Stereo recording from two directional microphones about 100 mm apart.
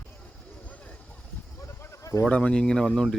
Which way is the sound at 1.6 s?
30° left (ahead or behind).